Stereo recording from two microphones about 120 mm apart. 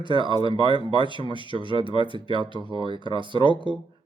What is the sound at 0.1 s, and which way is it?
Speech, 40° right (ahead or behind).